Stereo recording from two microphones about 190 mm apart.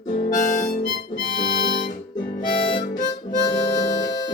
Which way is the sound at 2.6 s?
25° left (ahead or behind).